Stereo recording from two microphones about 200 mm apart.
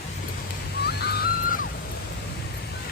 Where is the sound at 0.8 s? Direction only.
50° left (ahead or behind).